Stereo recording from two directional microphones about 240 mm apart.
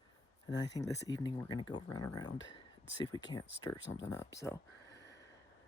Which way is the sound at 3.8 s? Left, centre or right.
Left.